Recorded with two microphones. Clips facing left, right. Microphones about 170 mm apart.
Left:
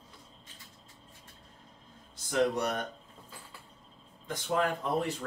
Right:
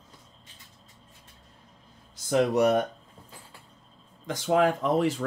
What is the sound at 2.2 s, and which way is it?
Speech, 90° right.